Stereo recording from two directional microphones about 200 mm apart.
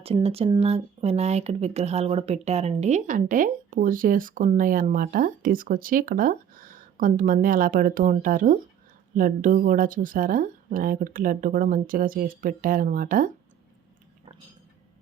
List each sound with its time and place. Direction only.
0.0 s speech: 30° right (ahead or behind)